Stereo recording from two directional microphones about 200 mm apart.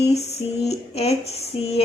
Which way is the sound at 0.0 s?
35° left (ahead or behind).